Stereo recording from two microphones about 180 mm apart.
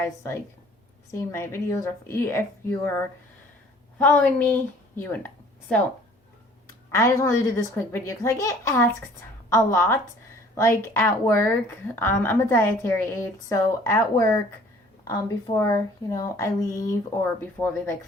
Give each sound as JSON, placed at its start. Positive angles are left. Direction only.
{"t": 1.3, "sound": "a woman's voice", "side_deg": 15}
{"t": 6.9, "sound": "a woman's voice", "side_deg": 15}